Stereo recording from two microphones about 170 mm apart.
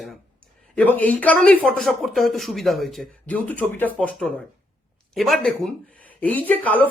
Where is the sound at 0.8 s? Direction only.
10° left (ahead or behind).